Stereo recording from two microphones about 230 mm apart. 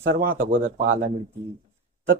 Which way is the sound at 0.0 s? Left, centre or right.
Right.